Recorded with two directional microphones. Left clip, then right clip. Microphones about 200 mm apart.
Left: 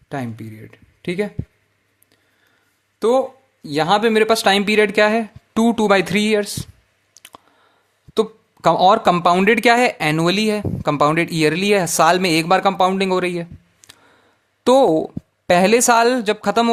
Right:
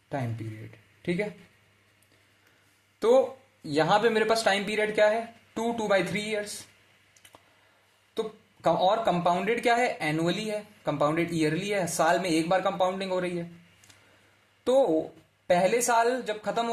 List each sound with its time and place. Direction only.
0.7 s speech: 40° left (ahead or behind)
3.0 s speech: 35° left (ahead or behind); by 6.4 s 50° left (ahead or behind)
7.1 s clicking: 50° left (ahead or behind)
8.1 s speech: 50° left (ahead or behind)